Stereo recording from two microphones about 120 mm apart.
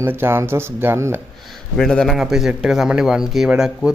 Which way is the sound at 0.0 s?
20° right (ahead or behind).